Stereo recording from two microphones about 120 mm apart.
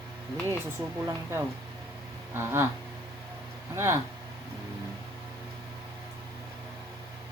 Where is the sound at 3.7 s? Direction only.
20° right (ahead or behind).